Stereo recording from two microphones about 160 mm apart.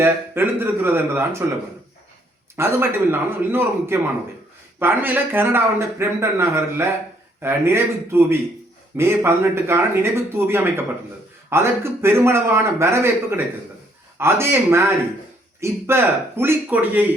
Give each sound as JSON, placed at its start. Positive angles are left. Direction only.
{"t": 0.0, "sound": "a man's voice", "side_deg": -15}
{"t": 2.6, "sound": "a man's voice", "side_deg": -15}